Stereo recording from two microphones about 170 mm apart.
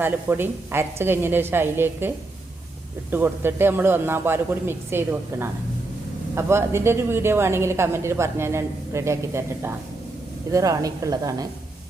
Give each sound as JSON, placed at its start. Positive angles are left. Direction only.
{"t": 0.0, "sound": "a woman's voice", "side_deg": -10}